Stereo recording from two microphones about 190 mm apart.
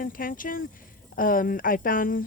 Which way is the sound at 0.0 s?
45° left (ahead or behind).